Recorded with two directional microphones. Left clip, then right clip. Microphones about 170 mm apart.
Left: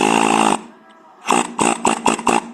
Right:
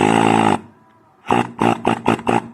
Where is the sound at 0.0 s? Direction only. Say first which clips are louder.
Even; 5° left (ahead or behind).